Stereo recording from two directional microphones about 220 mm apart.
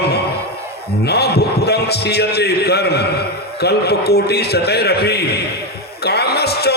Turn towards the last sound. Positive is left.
turn(degrees=45)  # may be behind; listen again after turning